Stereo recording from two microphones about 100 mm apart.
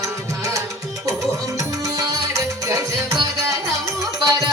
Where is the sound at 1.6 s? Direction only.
35° right (ahead or behind).